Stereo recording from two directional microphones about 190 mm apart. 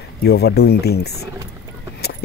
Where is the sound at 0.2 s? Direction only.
55° left (ahead or behind).